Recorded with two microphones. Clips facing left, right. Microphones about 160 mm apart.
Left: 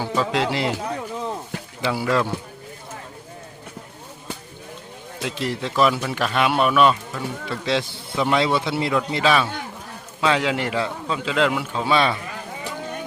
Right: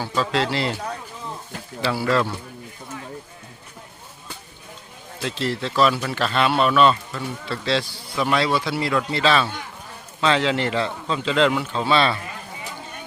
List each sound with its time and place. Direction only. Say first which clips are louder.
0.0 s a man's voice: left 1 dB; 15° left (ahead or behind)
1.8 s a man's voice: even; 15° left (ahead or behind)
5.2 s a man's voice: right 1 dB; 15° left (ahead or behind)